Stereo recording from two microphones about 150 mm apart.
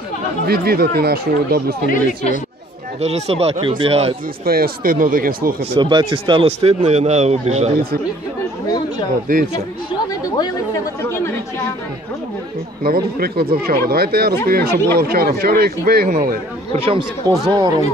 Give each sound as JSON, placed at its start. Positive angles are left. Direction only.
{"t": 0.5, "sound": "speech", "side_deg": -90}
{"t": 1.9, "sound": "speech", "side_deg": 60}
{"t": 3.0, "sound": "speech", "side_deg": -45}
{"t": 4.5, "sound": "speech", "side_deg": -80}
{"t": 5.7, "sound": "speech", "side_deg": -30}
{"t": 11.0, "sound": "speech", "side_deg": 15}
{"t": 12.8, "sound": "speech", "side_deg": -85}
{"t": 16.7, "sound": "speech", "side_deg": -40}
{"t": 17.3, "sound": "speech", "side_deg": -30}